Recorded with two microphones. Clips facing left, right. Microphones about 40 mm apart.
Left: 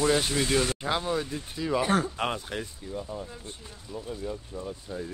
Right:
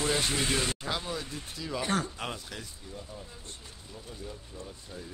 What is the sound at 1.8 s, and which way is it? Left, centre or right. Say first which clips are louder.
Speech: left 4 dB; centre.